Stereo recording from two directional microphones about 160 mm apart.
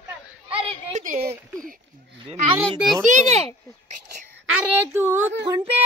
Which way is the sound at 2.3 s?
40° right (ahead or behind).